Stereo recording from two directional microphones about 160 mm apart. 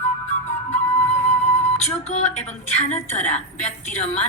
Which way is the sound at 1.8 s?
45° left (ahead or behind).